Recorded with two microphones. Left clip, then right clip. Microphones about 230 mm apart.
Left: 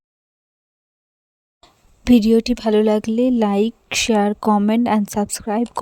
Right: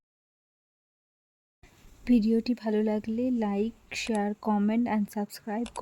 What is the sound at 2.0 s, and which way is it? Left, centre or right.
Speech, left.